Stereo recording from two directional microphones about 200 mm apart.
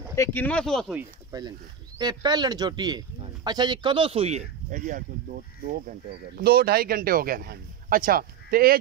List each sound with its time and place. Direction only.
0.1 s speech: 10° left (ahead or behind)
1.3 s speech: 15° right (ahead or behind); by 8.7 s 50° right (ahead or behind)